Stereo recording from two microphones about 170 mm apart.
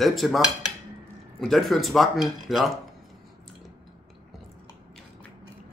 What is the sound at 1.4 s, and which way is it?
Speech, centre (ahead or behind).